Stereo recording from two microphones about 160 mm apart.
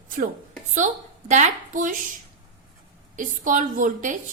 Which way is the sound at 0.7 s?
50° right (ahead or behind).